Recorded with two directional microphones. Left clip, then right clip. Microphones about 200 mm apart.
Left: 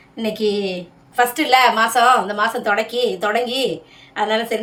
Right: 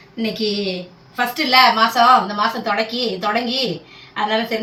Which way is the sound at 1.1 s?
60° left (ahead or behind).